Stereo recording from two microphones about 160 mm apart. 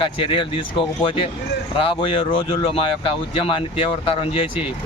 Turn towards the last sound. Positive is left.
turn(degrees=35)  # may be behind; listen again after turning